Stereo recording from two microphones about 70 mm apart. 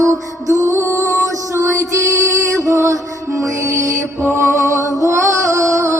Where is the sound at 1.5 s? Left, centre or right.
Right.